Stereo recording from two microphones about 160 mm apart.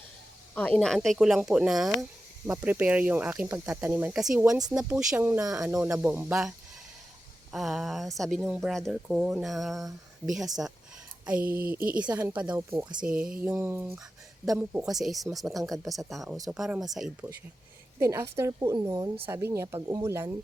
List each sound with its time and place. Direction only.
0.5 s speech: 10° left (ahead or behind); by 6.5 s 10° right (ahead or behind)
7.5 s speech: centre (ahead or behind)
12.5 s a woman's voice: 20° right (ahead or behind)
13.0 s a woman's voice: 5° right (ahead or behind)